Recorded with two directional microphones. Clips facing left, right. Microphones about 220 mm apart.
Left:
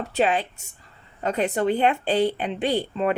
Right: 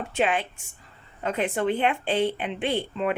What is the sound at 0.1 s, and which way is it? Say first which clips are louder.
Speech: left 3 dB; 35° left (ahead or behind).